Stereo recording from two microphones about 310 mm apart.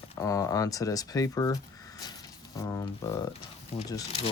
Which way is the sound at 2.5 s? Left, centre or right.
Centre.